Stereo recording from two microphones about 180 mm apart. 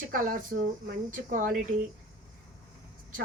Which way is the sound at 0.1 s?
50° right (ahead or behind).